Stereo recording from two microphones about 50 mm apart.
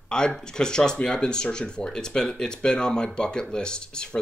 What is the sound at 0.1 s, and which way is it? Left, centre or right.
Speech, centre.